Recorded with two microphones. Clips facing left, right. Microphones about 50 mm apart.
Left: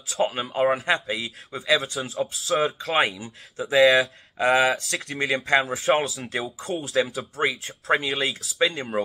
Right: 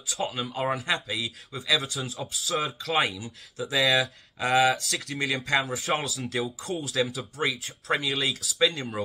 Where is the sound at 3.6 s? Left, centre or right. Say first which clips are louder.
Left 7 dB; centre.